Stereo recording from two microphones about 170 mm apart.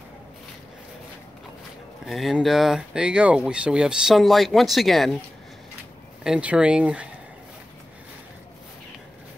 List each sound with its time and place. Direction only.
2.0 s speech: centre (ahead or behind)
6.2 s speech: 5° right (ahead or behind)